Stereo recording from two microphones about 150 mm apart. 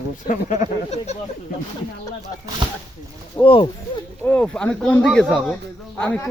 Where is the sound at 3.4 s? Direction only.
35° left (ahead or behind).